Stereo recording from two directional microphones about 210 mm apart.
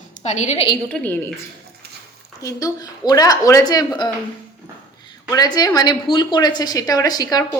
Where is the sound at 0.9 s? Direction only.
10° left (ahead or behind).